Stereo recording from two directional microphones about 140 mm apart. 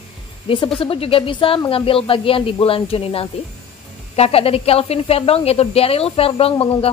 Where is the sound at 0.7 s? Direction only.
40° left (ahead or behind).